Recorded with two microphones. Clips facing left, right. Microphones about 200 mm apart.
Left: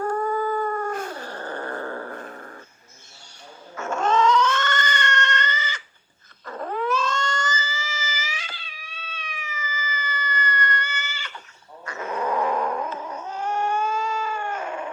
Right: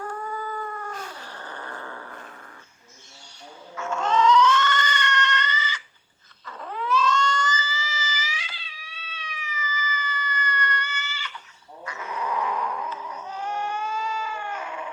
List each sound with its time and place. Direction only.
0.0 s cat: 45° left (ahead or behind)
3.8 s cat: 45° left (ahead or behind)
6.4 s dog: 50° left (ahead or behind)